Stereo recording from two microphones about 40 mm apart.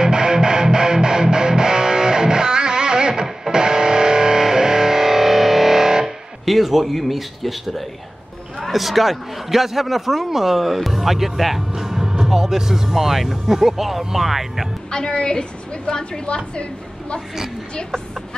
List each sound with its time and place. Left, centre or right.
0.0 s music: centre
8.5 s a man's voice: centre
14.9 s a woman's voice: left